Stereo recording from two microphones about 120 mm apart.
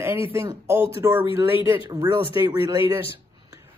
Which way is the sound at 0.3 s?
20° right (ahead or behind).